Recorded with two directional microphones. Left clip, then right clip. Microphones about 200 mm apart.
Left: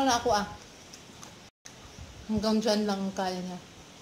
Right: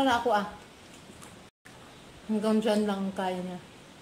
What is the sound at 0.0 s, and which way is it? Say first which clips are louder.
Speech: right 1 dB; 15° left (ahead or behind).